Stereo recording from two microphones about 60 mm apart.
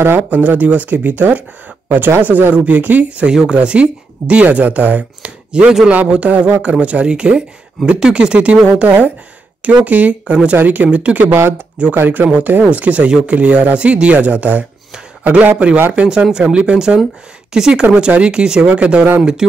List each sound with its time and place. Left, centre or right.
0.0 s speech: right
5.5 s speech: centre
8.8 s speech: right
11.3 s speech: right
11.9 s speech: right